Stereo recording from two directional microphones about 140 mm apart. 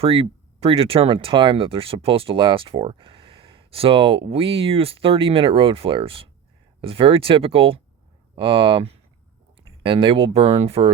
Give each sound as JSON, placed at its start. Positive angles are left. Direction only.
{"t": 0.0, "sound": "speech", "side_deg": -40}